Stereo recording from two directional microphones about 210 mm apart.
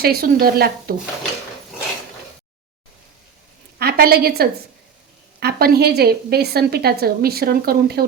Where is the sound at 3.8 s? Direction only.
45° right (ahead or behind).